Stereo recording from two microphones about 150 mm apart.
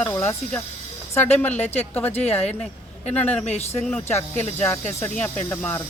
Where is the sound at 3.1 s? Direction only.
10° left (ahead or behind).